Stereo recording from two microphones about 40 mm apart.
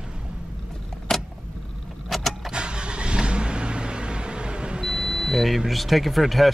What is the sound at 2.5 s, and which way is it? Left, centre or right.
Vehicle, right.